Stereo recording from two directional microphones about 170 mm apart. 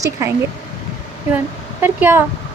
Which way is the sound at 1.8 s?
15° right (ahead or behind).